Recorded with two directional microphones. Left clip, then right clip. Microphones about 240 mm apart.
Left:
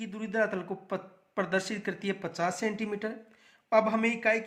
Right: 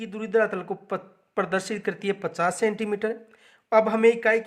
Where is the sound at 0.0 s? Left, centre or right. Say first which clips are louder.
Right 7 dB; right.